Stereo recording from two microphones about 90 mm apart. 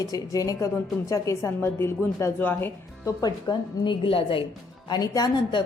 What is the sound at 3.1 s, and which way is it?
A woman's voice, 50° left (ahead or behind).